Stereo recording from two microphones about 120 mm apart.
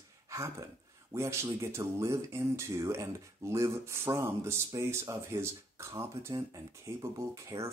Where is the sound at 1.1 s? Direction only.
25° right (ahead or behind).